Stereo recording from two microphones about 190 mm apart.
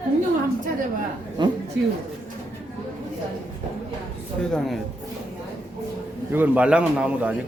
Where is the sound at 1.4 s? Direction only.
25° right (ahead or behind).